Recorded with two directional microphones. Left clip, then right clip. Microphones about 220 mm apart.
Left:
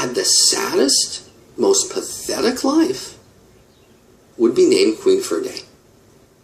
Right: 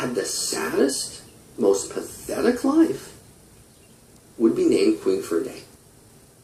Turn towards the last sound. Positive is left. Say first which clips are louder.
# left 6 dB
turn(degrees=30)  # may be behind; listen again after turning